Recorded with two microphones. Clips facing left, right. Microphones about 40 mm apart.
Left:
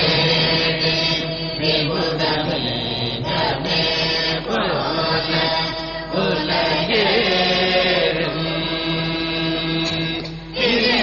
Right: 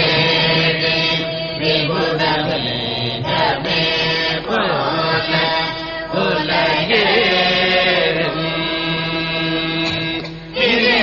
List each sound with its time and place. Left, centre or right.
0.0 s mantra: right
3.3 s chant: right
10.6 s music: right